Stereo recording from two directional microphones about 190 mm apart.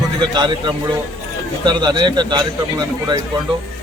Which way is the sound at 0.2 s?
25° right (ahead or behind).